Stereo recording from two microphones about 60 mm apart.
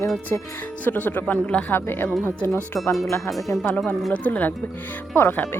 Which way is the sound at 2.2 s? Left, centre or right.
Left.